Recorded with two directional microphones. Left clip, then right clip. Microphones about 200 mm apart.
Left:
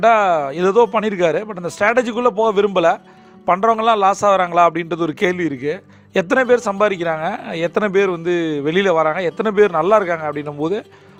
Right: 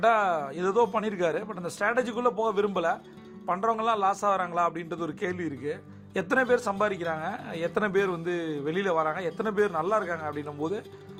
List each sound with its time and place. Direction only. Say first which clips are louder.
0.0 s a man's voice: left 10 dB; 35° left (ahead or behind)